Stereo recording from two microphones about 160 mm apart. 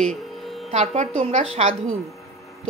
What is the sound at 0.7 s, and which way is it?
A woman's voice, 45° right (ahead or behind).